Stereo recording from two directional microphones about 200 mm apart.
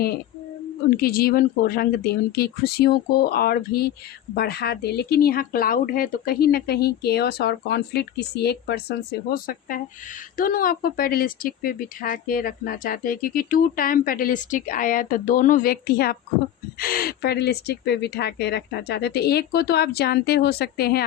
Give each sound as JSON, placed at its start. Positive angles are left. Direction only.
{"t": 0.9, "sound": "speech", "side_deg": 50}